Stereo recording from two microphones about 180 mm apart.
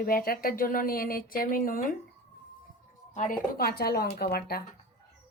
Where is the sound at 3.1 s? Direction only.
50° left (ahead or behind).